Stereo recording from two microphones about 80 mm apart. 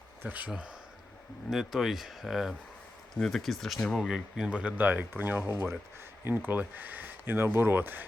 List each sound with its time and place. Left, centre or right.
0.2 s speech: right
1.5 s speech: centre
4.4 s speech: centre